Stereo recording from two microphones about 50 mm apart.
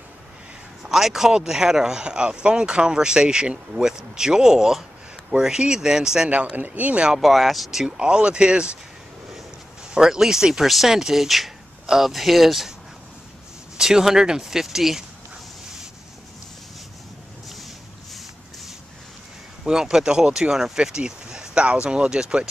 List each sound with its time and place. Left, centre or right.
0.8 s speech: centre
6.5 s speech: right
7.2 s speech: centre
8.0 s speech: centre
9.9 s speech: centre
13.7 s speech: centre
19.6 s speech: centre